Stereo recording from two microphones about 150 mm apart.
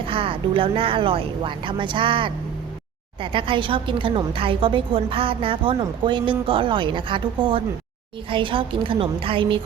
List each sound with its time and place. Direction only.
0.0 s a woman's voice: 35° right (ahead or behind)